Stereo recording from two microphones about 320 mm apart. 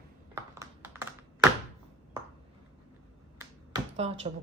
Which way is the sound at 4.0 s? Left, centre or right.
Centre.